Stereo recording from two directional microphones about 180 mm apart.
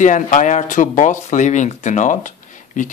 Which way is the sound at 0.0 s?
45° left (ahead or behind).